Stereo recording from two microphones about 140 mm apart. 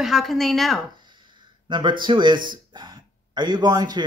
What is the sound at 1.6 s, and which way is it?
Speech, 35° right (ahead or behind).